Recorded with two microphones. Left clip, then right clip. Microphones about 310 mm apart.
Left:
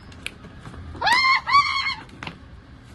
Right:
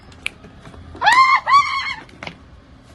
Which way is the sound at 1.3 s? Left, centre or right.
Centre.